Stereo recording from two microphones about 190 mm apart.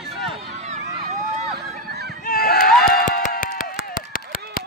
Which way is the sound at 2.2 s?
50° left (ahead or behind).